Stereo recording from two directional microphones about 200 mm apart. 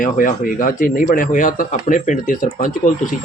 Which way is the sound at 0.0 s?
40° left (ahead or behind).